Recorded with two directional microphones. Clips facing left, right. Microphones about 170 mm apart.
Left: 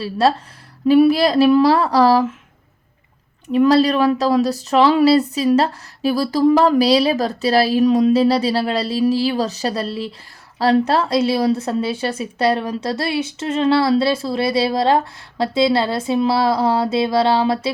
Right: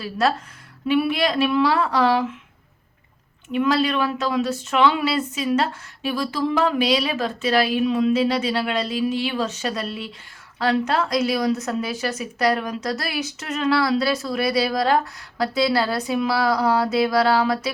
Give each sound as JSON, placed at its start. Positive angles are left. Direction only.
{"t": 0.0, "sound": "speech", "side_deg": 30}
{"t": 3.5, "sound": "a woman's voice", "side_deg": 35}